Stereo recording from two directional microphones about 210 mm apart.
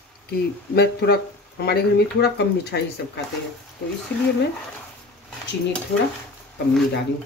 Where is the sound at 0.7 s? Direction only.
50° left (ahead or behind).